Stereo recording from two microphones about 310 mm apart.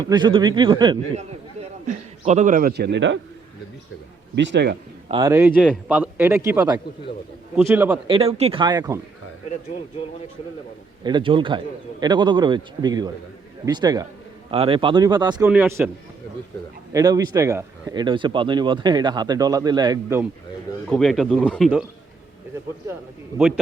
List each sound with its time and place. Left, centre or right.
0.0 s a man's voice: centre; by 3.2 s right
4.4 s a man's voice: right
5.0 s a man's voice: centre
8.1 s a man's voice: centre
11.0 s a man's voice: centre
16.9 s a man's voice: centre
20.9 s speech: centre